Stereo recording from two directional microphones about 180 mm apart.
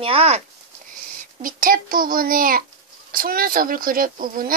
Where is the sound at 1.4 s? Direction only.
50° right (ahead or behind).